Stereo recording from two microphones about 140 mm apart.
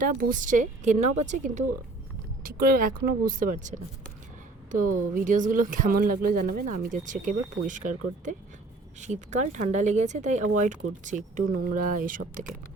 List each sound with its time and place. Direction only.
0.0 s speech: 85° right; by 1.6 s 60° right (ahead or behind)
2.4 s speech: 90° right; by 12.5 s 70° right (ahead or behind)